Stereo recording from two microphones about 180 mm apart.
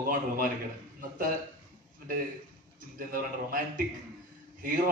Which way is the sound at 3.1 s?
50° right (ahead or behind).